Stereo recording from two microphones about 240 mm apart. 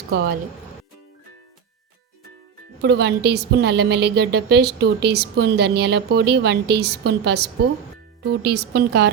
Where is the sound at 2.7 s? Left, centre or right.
Right.